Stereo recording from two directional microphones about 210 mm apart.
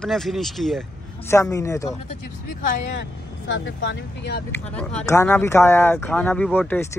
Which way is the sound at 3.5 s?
60° left (ahead or behind).